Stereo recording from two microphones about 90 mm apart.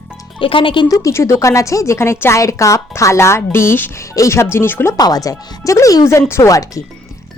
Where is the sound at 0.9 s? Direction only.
40° left (ahead or behind).